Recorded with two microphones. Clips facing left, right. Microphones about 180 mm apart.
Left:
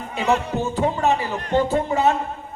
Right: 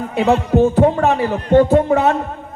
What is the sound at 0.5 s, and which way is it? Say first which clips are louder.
A man's voice: right 10 dB; 60° right (ahead or behind).